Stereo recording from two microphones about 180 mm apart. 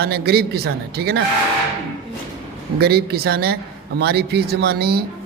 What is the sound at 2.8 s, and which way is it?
A man's voice, 60° right (ahead or behind).